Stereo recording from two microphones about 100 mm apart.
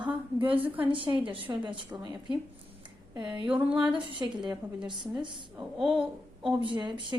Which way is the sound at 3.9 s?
55° right (ahead or behind).